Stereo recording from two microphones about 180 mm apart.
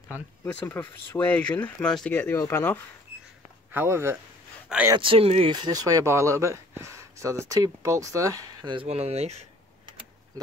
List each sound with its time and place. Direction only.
0.5 s speech: 10° left (ahead or behind)
3.7 s speech: 15° right (ahead or behind)
4.9 s speech: 30° right (ahead or behind)